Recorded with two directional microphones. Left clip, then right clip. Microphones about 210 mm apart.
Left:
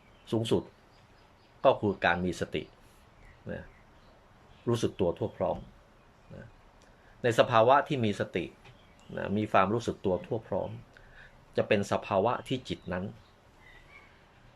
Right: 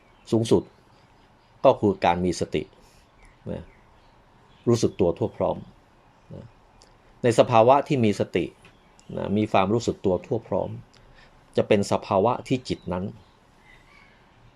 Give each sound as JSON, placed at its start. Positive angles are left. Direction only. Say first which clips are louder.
{"t": 0.3, "sound": "speech", "louder": "right 8 dB", "side_deg": -25}
{"t": 1.6, "sound": "speech", "louder": "right 6 dB", "side_deg": -25}
{"t": 4.6, "sound": "speech", "louder": "right 7 dB", "side_deg": -25}